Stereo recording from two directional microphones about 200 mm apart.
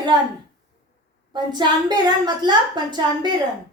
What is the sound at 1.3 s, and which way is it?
Speech, 20° right (ahead or behind).